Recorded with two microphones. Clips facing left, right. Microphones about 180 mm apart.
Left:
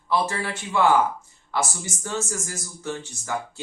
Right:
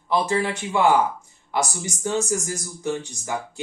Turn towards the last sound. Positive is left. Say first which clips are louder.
# right 3 dB
turn(degrees=-15)  # may be behind; listen again after turning